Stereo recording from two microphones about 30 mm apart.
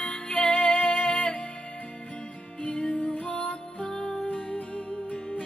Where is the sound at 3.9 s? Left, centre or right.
Centre.